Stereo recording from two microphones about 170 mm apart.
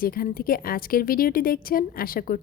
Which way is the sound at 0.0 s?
60° left (ahead or behind).